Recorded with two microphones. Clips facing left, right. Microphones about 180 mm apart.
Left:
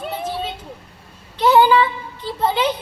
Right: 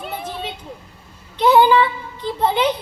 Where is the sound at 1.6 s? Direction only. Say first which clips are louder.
Even; 10° left (ahead or behind).